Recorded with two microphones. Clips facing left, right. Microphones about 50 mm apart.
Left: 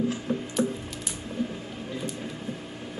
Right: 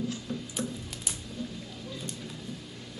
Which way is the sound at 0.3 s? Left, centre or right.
Left.